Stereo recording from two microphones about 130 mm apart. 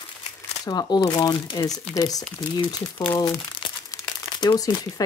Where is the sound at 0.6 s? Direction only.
30° left (ahead or behind).